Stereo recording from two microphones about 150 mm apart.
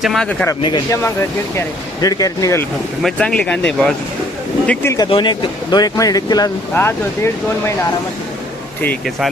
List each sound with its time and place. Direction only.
0.0 s speech: centre (ahead or behind)
0.6 s speech: 30° left (ahead or behind)
1.0 s speech: 20° left (ahead or behind)
3.0 s speech: 5° left (ahead or behind)
5.0 s speech: 35° left (ahead or behind)
6.7 s speech: 15° left (ahead or behind)